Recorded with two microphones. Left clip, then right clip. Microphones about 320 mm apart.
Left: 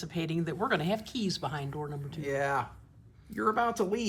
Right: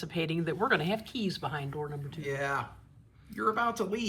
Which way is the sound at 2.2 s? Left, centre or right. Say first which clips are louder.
Left 2 dB; left.